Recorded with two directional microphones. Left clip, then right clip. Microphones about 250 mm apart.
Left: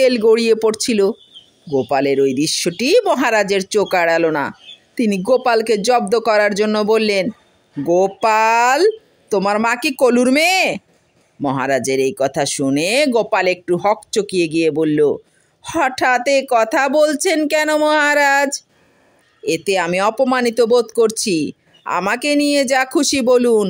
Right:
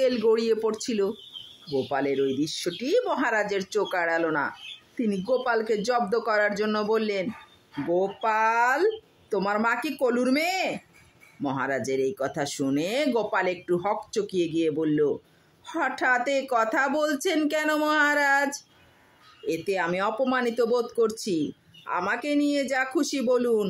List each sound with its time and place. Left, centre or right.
0.0 s speech: left